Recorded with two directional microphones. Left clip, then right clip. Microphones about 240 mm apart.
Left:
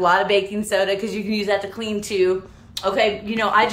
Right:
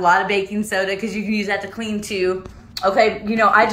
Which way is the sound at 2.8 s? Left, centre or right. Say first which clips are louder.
Right 4 dB; centre.